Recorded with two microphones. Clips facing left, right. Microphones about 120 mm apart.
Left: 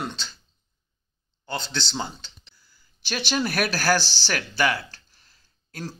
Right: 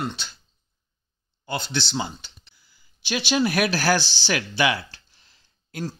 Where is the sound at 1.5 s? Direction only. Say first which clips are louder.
Right 3 dB; 10° right (ahead or behind).